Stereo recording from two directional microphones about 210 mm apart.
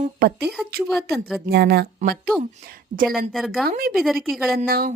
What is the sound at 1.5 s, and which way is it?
A woman's voice, 50° right (ahead or behind).